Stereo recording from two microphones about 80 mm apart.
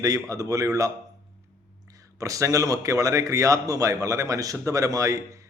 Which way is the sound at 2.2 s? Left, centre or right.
Right.